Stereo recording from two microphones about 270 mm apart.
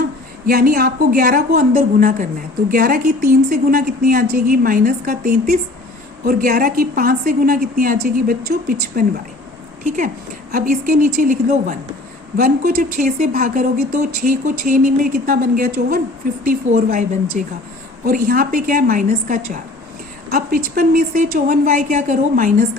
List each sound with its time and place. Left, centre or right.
0.4 s a woman's voice: right
20.7 s a woman's voice: right